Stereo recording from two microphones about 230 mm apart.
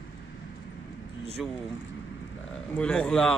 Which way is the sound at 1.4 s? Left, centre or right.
Centre.